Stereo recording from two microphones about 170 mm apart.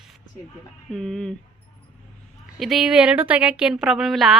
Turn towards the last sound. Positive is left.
turn(degrees=0)  # may be behind; listen again after turning